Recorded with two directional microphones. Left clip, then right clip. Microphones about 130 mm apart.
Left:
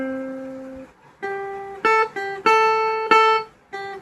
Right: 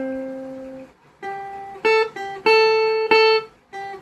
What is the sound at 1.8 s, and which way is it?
Music, 90° left.